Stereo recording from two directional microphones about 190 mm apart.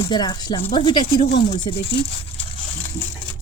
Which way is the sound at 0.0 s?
20° left (ahead or behind).